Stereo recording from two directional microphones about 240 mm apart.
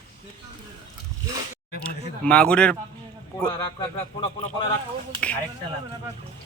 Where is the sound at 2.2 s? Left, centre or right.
Centre.